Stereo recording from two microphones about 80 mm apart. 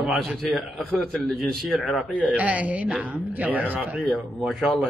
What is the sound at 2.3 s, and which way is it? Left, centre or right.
Speech, centre.